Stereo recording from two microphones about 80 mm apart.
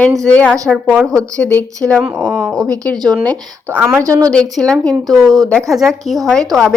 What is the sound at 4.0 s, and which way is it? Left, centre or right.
Speech, right.